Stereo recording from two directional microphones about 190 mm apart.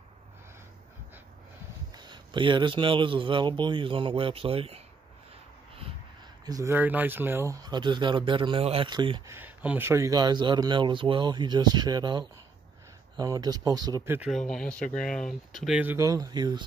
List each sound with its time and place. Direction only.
2.0 s speech: 25° right (ahead or behind)
6.4 s speech: 15° right (ahead or behind)
9.3 s speech: 10° right (ahead or behind)
14.3 s speech: 5° left (ahead or behind); by 16.6 s 20° right (ahead or behind)